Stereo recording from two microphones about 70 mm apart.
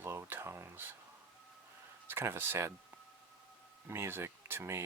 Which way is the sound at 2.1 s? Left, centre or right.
Right.